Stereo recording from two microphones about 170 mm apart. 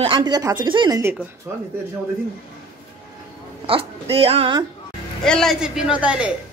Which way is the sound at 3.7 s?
35° right (ahead or behind).